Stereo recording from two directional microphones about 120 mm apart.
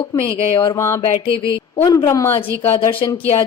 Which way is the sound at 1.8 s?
30° left (ahead or behind).